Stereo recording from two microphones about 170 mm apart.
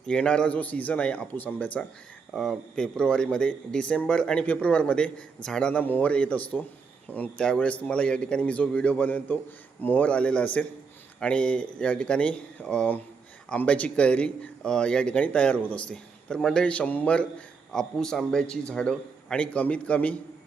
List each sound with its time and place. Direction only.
0.0 s speech: 5° left (ahead or behind)